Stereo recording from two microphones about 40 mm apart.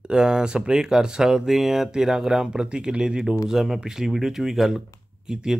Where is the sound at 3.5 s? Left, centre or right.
Centre.